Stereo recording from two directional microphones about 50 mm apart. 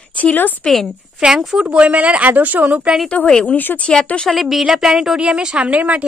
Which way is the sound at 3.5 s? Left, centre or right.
Left.